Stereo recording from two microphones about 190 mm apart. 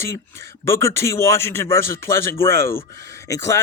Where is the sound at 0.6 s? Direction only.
15° left (ahead or behind).